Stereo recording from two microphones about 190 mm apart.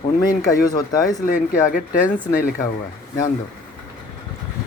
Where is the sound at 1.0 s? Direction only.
40° left (ahead or behind).